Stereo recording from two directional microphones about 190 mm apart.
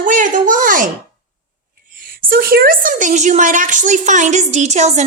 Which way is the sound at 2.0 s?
50° right (ahead or behind).